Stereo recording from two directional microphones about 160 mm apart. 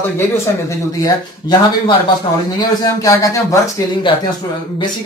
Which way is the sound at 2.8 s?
20° left (ahead or behind).